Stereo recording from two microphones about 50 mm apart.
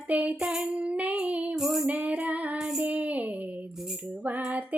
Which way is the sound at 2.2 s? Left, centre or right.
Right.